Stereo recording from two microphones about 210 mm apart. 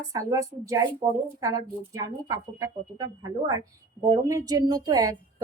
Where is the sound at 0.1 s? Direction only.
15° right (ahead or behind).